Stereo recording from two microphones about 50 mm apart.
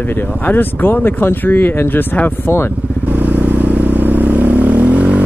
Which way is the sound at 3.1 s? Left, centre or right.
Right.